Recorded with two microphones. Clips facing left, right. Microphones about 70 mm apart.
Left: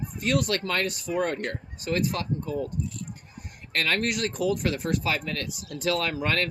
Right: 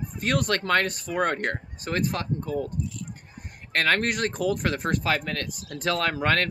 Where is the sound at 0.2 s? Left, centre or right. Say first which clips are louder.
Even; right.